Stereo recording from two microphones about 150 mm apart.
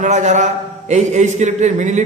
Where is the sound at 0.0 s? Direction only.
55° right (ahead or behind).